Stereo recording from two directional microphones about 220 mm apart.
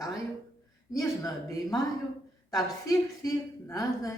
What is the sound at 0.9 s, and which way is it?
A woman's voice, 15° left (ahead or behind).